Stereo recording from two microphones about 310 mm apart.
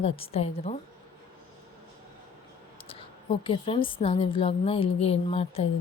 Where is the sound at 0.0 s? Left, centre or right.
Centre.